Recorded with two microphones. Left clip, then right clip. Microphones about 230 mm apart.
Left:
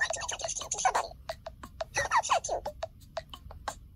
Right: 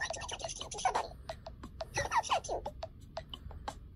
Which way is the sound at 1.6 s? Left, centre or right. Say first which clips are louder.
Left 5 dB; left.